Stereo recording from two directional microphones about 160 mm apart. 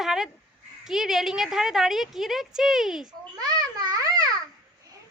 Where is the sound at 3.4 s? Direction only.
25° right (ahead or behind).